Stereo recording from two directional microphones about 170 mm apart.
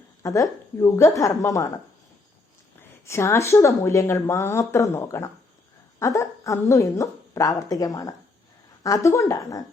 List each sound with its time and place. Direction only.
0.2 s a woman's voice: 20° left (ahead or behind)
3.1 s a woman's voice: 15° left (ahead or behind)